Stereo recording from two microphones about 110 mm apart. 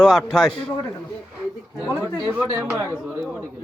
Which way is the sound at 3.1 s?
15° right (ahead or behind).